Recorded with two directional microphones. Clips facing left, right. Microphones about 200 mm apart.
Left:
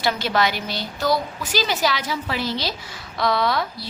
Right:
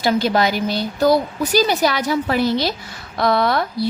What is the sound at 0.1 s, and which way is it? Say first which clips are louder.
A woman's voice: right 5 dB; 45° right (ahead or behind).